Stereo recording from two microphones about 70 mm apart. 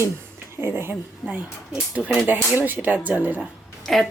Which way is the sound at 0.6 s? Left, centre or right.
Right.